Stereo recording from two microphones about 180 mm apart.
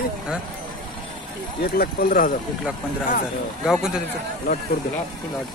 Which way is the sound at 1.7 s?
50° left (ahead or behind).